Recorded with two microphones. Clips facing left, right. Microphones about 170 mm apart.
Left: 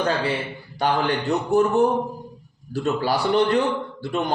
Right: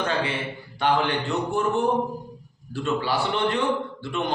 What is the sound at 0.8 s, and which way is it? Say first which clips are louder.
A man's voice: left 1 dB; 40° left (ahead or behind).